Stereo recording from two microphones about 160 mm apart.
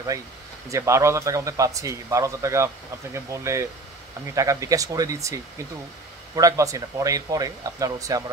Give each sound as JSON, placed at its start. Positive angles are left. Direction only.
{"t": 0.7, "sound": "speech", "side_deg": -20}